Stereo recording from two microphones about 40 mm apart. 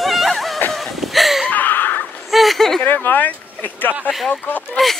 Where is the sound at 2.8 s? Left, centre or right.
Left.